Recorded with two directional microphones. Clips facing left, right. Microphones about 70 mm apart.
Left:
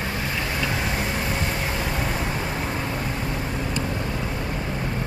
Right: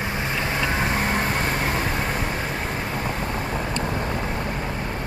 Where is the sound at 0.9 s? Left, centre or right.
Right.